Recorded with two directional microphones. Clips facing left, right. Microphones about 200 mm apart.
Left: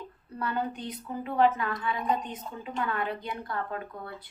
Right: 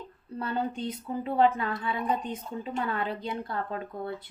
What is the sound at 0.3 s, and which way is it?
A woman's voice, 25° right (ahead or behind).